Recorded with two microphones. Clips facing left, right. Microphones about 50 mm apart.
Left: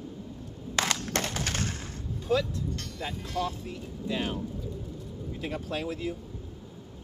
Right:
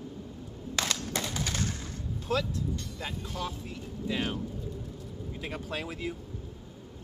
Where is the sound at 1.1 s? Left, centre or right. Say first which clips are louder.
Left 2 dB; left.